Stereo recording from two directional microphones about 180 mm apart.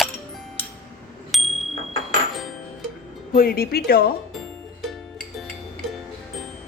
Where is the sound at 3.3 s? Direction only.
55° left (ahead or behind).